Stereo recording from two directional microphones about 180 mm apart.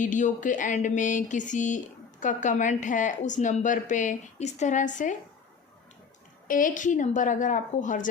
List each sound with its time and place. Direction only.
0.0 s a woman's voice: 45° left (ahead or behind)
6.5 s a woman's voice: 45° left (ahead or behind)